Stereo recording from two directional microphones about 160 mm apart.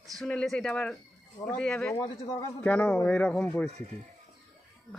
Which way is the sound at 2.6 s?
5° left (ahead or behind).